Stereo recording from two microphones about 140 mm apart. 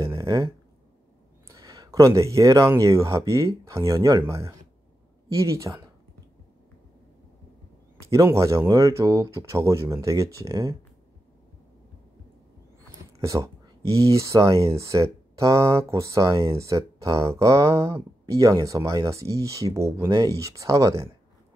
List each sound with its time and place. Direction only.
0.0 s a sound: 30° right (ahead or behind)
1.5 s speech: 25° right (ahead or behind)
8.1 s speech: 20° right (ahead or behind)
13.2 s speech: 20° right (ahead or behind)
16.3 s speech: 40° right (ahead or behind)
16.5 s speech: 25° right (ahead or behind)